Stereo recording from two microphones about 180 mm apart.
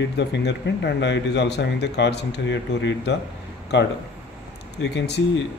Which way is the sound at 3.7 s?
70° left (ahead or behind).